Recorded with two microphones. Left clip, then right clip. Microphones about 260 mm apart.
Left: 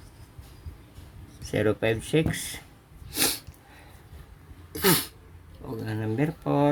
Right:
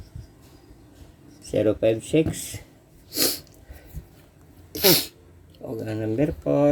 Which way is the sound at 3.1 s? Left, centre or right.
Centre.